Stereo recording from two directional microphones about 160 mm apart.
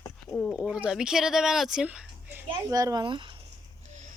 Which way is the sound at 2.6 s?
20° right (ahead or behind).